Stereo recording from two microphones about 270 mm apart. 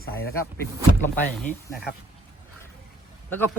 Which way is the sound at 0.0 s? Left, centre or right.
Left.